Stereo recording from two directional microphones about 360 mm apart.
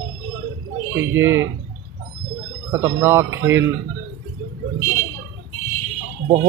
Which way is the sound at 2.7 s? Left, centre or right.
Centre.